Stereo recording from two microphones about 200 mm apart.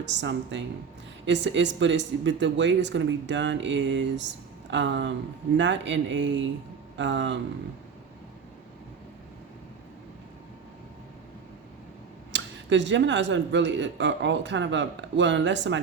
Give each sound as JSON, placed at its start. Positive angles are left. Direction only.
{"t": 0.0, "sound": "speech", "side_deg": -60}
{"t": 12.3, "sound": "speech", "side_deg": -60}